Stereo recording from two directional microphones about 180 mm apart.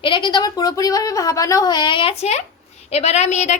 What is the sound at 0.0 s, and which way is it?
A woman's voice, 25° left (ahead or behind).